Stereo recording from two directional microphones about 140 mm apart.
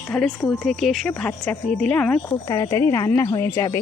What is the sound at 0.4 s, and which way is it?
Speech, 5° left (ahead or behind).